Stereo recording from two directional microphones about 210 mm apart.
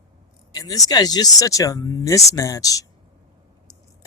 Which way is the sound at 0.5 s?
15° left (ahead or behind).